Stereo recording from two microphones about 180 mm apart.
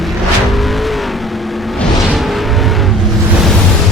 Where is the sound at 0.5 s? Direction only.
Centre (ahead or behind).